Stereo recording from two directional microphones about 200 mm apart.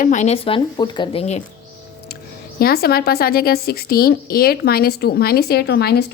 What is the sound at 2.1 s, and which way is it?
Music, 50° left (ahead or behind).